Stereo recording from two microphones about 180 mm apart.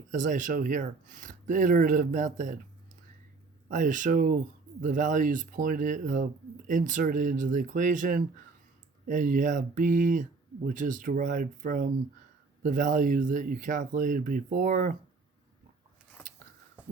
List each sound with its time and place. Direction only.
0.1 s speech: 45° right (ahead or behind)
3.7 s speech: 45° right (ahead or behind)